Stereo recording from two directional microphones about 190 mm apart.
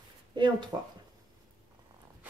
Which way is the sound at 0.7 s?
15° right (ahead or behind).